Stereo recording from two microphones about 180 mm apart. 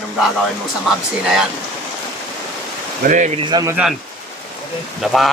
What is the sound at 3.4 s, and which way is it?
Speech, 20° right (ahead or behind).